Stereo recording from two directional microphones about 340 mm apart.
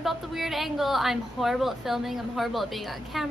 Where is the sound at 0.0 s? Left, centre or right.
Centre.